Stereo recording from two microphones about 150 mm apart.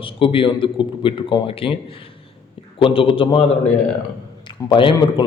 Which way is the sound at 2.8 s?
35° left (ahead or behind).